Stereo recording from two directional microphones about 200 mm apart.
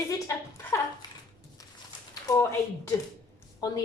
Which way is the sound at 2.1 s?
15° left (ahead or behind).